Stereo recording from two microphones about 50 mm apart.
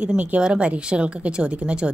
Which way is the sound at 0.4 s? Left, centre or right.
Right.